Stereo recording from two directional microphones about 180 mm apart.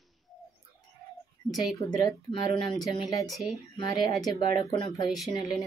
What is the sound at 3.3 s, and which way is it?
Speech, centre (ahead or behind).